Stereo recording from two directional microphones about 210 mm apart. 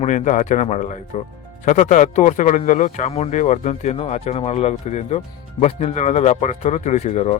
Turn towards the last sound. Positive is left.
turn(degrees=35)  # may be behind; listen again after turning